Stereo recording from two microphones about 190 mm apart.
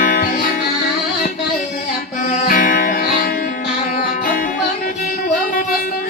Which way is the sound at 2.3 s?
45° left (ahead or behind).